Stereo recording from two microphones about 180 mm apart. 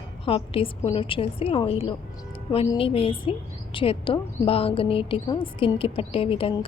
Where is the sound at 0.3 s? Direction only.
30° left (ahead or behind).